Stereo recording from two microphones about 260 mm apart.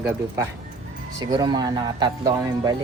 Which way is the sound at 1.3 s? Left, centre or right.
Centre.